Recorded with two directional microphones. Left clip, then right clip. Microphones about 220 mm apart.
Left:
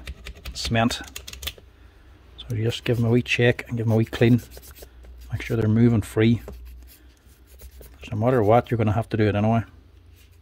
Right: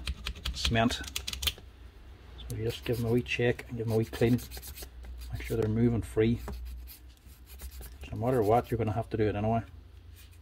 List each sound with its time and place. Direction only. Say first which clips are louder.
0.7 s speech: left 5 dB; 35° left (ahead or behind)
2.5 s speech: left 8 dB; 55° left (ahead or behind)
5.3 s speech: left 6 dB; 55° left (ahead or behind)
8.0 s speech: left 8 dB; 55° left (ahead or behind)